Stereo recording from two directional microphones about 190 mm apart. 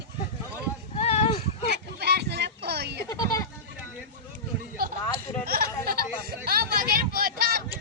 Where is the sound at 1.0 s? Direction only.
30° left (ahead or behind).